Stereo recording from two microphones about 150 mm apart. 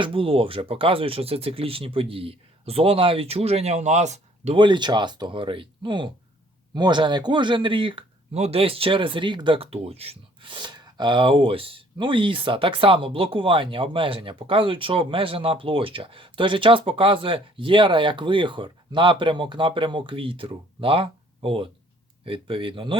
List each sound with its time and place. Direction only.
0.0 s speech: 35° right (ahead or behind)
4.5 s speech: 30° right (ahead or behind)